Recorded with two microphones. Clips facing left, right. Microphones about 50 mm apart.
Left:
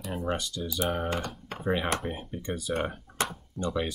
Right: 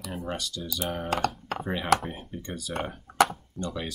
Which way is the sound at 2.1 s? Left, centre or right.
Centre.